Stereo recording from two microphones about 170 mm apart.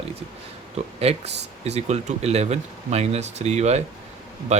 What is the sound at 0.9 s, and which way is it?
Speech, 35° right (ahead or behind).